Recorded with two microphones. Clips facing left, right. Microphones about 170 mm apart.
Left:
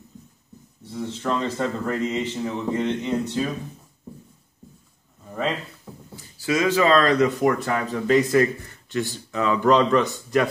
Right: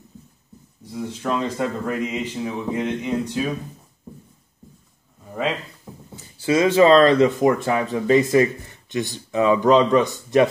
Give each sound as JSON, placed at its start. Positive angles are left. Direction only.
{"t": 0.8, "sound": "speech", "side_deg": -10}
{"t": 6.1, "sound": "speech", "side_deg": -25}